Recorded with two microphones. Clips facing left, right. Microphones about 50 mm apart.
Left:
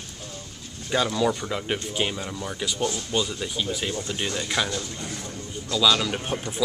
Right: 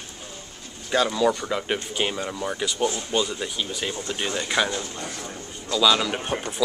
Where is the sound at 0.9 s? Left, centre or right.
Centre.